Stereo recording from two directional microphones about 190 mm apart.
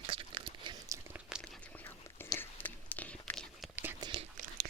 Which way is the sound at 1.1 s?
5° right (ahead or behind).